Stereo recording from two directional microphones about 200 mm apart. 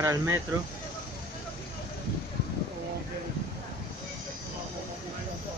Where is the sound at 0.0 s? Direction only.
15° right (ahead or behind).